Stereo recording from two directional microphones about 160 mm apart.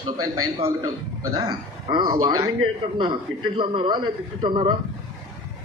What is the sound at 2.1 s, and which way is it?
A man's voice, 25° right (ahead or behind).